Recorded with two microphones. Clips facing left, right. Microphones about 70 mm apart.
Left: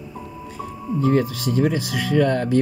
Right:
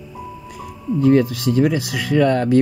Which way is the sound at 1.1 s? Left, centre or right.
Right.